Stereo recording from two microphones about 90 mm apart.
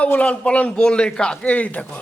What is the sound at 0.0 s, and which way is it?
A man's voice, 15° left (ahead or behind).